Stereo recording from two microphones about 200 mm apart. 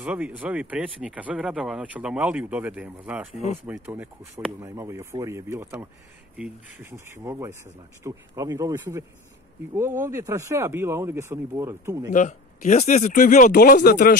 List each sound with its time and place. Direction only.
0.0 s speech: 5° right (ahead or behind)
12.1 s speech: 40° left (ahead or behind)